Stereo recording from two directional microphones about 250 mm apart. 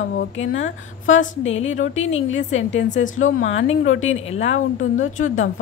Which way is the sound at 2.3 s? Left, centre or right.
Left.